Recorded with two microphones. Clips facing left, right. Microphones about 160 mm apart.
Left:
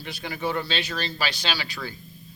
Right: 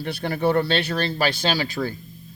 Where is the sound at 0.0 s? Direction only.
60° right (ahead or behind).